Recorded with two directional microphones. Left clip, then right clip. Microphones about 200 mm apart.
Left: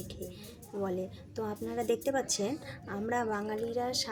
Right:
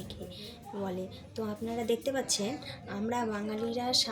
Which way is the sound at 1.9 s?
55° left (ahead or behind).